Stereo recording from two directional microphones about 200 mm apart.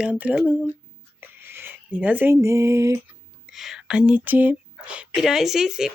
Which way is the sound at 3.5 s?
Centre (ahead or behind).